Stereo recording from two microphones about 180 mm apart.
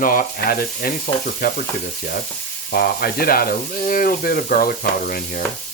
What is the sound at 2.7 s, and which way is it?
Speech, 55° left (ahead or behind).